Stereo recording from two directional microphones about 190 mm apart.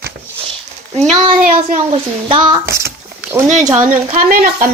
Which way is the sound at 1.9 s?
25° right (ahead or behind).